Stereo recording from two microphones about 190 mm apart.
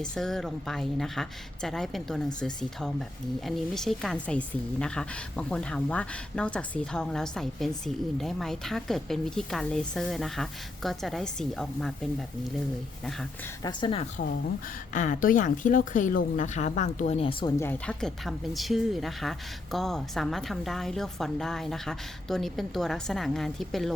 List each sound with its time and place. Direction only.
0.0 s a woman's voice: 5° left (ahead or behind)
13.6 s speech: 25° left (ahead or behind)
14.9 s speech: 45° left (ahead or behind)
17.6 s a woman's voice: 10° left (ahead or behind)